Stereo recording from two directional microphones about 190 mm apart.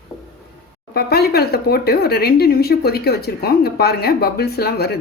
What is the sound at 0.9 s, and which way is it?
Speech, 55° left (ahead or behind).